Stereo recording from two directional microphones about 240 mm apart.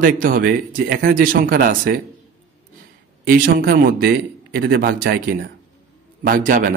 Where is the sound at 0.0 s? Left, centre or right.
Right.